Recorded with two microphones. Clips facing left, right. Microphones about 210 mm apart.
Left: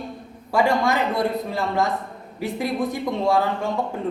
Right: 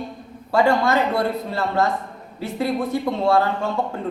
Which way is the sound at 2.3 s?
15° left (ahead or behind).